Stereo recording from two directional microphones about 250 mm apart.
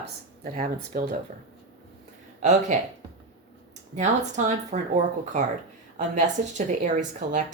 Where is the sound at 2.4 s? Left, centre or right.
Right.